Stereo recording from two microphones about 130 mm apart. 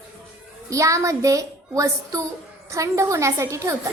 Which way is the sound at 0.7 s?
25° right (ahead or behind).